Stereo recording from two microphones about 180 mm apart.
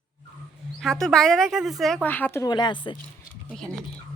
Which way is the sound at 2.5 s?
25° left (ahead or behind).